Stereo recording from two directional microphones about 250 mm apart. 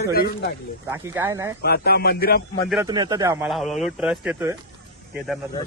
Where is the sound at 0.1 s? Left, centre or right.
Left.